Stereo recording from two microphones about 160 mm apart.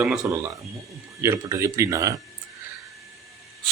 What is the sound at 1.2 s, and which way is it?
Speech, 20° right (ahead or behind).